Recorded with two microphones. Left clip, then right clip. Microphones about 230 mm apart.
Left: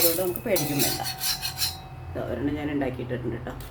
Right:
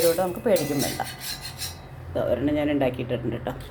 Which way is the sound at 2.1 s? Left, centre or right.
Centre.